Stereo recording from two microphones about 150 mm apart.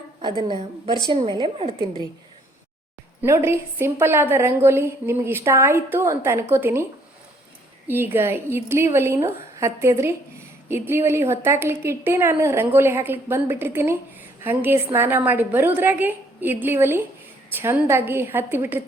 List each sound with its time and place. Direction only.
1.3 s a woman's voice: 35° right (ahead or behind)
3.2 s a woman's voice: 15° right (ahead or behind)
7.9 s a woman's voice: 15° right (ahead or behind)